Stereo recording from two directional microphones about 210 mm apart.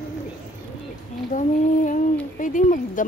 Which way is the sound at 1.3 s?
40° left (ahead or behind).